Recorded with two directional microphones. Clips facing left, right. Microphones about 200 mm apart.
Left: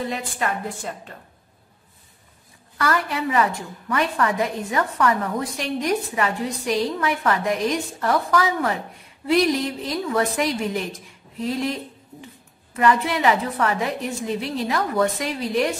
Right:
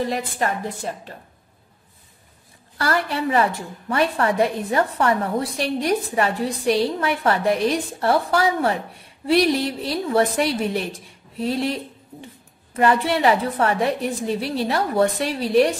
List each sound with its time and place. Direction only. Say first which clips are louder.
0.0 s a woman's voice: right 3 dB; 35° right (ahead or behind)
2.8 s a woman's voice: right 1 dB; 35° right (ahead or behind)
12.7 s a woman's voice: right 1 dB; 30° right (ahead or behind)